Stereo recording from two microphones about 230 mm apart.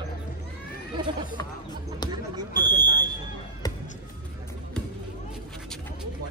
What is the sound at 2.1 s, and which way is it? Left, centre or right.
Smoke detector, centre.